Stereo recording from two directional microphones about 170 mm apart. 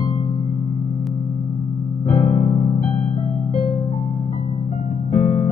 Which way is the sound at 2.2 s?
50° left (ahead or behind).